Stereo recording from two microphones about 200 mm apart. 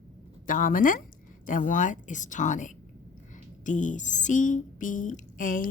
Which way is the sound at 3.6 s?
40° left (ahead or behind).